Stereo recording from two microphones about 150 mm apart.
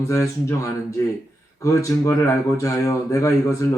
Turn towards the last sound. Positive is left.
turn(degrees=20)  # may be behind; listen again after turning